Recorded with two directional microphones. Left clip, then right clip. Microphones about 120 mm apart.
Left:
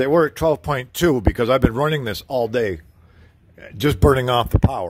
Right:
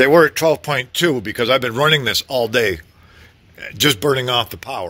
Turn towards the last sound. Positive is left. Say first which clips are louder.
# even
turn(degrees=55)  # may be behind; listen again after turning